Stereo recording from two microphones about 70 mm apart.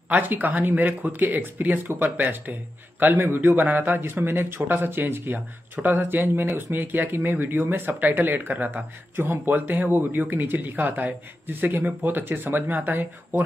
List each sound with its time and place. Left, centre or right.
0.1 s speech: right